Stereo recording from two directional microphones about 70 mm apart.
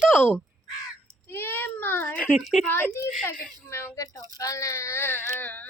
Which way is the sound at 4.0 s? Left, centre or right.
Left.